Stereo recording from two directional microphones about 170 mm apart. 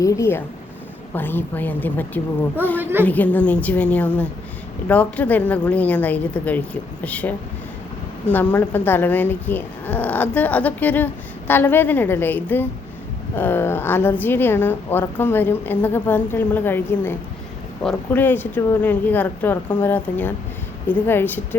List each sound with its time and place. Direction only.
0.0 s a woman's voice: 15° left (ahead or behind)
2.8 s a woman's voice: 10° right (ahead or behind)
3.1 s a woman's voice: 10° left (ahead or behind)